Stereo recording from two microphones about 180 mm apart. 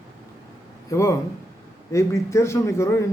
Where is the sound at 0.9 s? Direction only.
15° left (ahead or behind).